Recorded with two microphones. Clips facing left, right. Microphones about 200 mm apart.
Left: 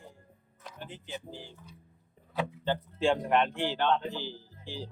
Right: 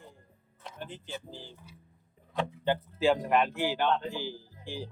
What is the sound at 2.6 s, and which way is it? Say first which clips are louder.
A man's voice: right 2 dB; 5° right (ahead or behind).